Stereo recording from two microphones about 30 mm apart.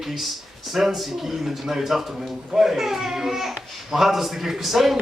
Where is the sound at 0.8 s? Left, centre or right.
Centre.